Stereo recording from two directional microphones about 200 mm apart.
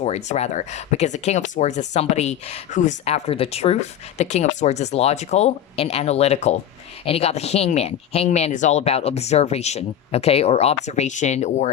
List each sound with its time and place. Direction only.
0.0 s speech: 35° left (ahead or behind)